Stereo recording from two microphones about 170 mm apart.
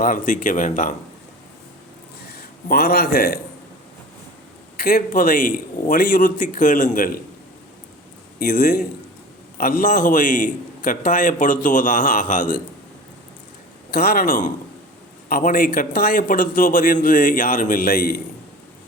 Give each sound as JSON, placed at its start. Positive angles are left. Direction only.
{"t": 0.0, "sound": "a man's voice", "side_deg": 50}
{"t": 2.3, "sound": "a man's voice", "side_deg": 65}
{"t": 4.8, "sound": "a man's voice", "side_deg": 60}
{"t": 8.4, "sound": "a man's voice", "side_deg": 60}
{"t": 13.9, "sound": "a man's voice", "side_deg": 60}